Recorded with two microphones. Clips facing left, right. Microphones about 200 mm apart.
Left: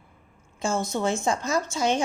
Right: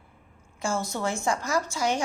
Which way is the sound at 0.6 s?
20° left (ahead or behind).